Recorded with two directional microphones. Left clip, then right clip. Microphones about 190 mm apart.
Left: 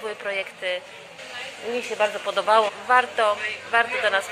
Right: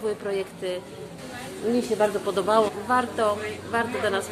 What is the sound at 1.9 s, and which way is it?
A woman's voice, 20° left (ahead or behind).